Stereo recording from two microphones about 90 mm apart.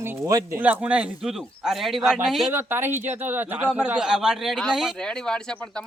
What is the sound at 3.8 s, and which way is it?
Speech, 10° right (ahead or behind).